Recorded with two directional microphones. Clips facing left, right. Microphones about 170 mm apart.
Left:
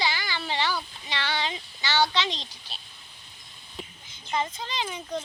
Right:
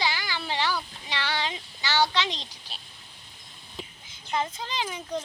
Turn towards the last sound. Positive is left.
turn(degrees=-5)  # may be behind; listen again after turning